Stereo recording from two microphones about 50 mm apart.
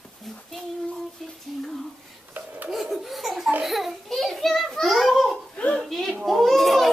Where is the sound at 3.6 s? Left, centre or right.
Centre.